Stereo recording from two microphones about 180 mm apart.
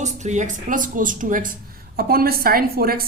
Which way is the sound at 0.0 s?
40° right (ahead or behind).